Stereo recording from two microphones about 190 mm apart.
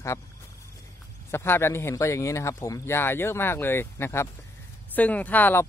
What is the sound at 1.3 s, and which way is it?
Speech, 10° left (ahead or behind).